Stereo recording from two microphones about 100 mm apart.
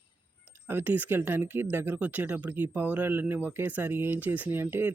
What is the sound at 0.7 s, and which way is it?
Speech, 20° right (ahead or behind).